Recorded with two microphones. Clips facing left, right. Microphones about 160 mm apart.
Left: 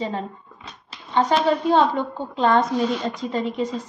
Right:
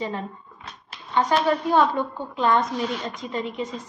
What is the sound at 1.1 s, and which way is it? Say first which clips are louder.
A woman's voice: left 2 dB; 25° left (ahead or behind).